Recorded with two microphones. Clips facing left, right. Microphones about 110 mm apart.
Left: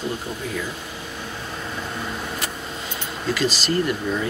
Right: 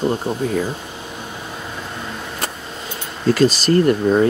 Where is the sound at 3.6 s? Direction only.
45° right (ahead or behind).